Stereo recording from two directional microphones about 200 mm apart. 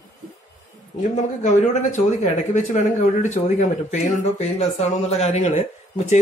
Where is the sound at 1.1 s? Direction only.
35° left (ahead or behind).